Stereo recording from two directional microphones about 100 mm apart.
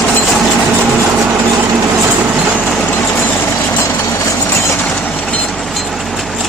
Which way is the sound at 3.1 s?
20° left (ahead or behind).